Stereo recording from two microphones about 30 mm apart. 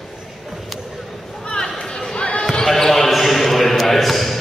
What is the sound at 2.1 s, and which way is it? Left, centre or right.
Basketball bounce, left.